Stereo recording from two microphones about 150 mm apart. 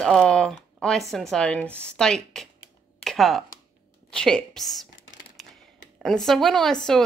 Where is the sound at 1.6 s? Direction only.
15° right (ahead or behind).